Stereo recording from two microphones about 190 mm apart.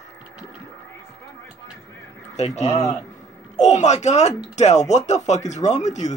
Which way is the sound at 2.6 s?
35° left (ahead or behind).